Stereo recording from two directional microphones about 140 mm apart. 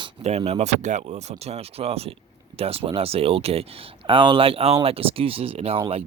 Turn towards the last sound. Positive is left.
turn(degrees=-45)  # may be behind; listen again after turning